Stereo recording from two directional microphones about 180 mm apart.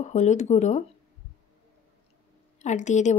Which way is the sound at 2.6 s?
40° left (ahead or behind).